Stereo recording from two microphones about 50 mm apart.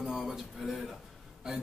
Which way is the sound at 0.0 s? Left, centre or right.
Centre.